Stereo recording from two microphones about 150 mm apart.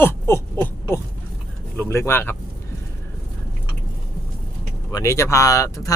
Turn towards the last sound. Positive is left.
turn(degrees=20)  # may be behind; listen again after turning